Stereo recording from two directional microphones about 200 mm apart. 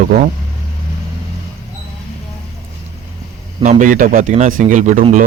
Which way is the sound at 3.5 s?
35° right (ahead or behind).